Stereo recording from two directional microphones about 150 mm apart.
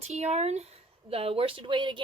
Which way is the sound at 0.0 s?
45° right (ahead or behind).